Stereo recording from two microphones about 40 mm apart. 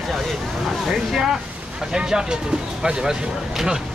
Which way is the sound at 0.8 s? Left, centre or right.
Centre.